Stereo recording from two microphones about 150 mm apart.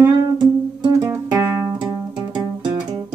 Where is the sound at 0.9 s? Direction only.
25° right (ahead or behind).